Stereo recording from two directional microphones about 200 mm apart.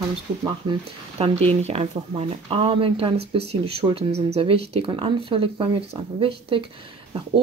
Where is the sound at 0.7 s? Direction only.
30° right (ahead or behind).